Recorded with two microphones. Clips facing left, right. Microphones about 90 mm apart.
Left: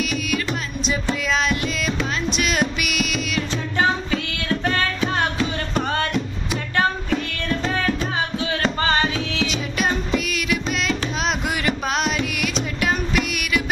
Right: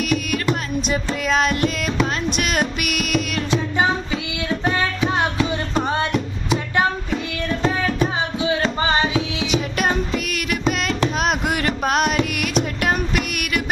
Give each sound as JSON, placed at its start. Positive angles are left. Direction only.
{"t": 0.0, "sound": "music", "side_deg": -50}
{"t": 3.8, "sound": "music", "side_deg": -15}
{"t": 9.7, "sound": "music", "side_deg": -50}